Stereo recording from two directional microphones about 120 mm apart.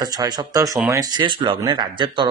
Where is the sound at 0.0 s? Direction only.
35° right (ahead or behind).